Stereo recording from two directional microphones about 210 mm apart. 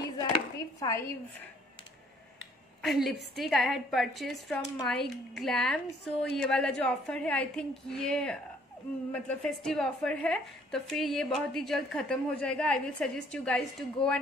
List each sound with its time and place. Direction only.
0.2 s chopping: 15° left (ahead or behind)
2.8 s a woman's voice: centre (ahead or behind)